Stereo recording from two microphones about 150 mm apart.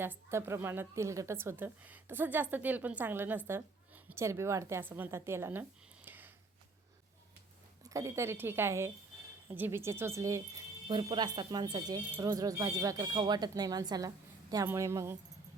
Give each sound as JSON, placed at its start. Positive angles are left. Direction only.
{"t": 0.0, "sound": "a woman's voice", "side_deg": -15}
{"t": 6.1, "sound": "a sound", "side_deg": -15}
{"t": 7.9, "sound": "a woman's voice", "side_deg": -20}